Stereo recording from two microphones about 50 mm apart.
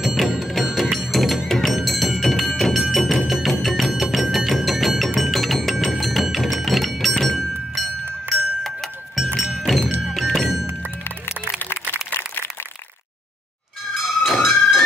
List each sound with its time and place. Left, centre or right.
0.0 s music: centre
5.8 s thunk: centre
9.6 s music: centre
11.9 s a sound: left
14.2 s music: centre